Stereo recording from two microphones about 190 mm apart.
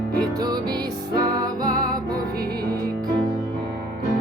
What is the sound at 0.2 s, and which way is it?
Music, 20° right (ahead or behind).